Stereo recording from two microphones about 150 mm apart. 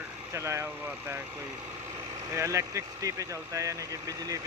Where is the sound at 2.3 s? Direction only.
20° right (ahead or behind).